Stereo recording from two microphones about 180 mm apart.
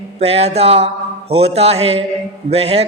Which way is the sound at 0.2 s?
35° right (ahead or behind).